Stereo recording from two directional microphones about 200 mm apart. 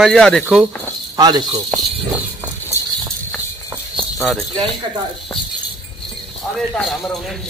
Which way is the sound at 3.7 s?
Centre (ahead or behind).